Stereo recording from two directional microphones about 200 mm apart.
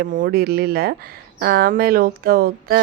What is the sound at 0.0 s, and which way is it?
Speech, 45° right (ahead or behind).